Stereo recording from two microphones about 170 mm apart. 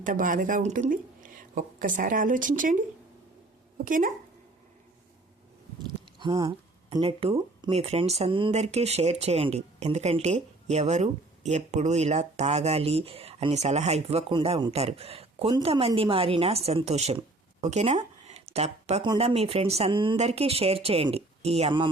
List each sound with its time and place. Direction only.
0.0 s speech: 50° right (ahead or behind)
3.8 s speech: 50° right (ahead or behind)
6.1 s speech: 25° right (ahead or behind)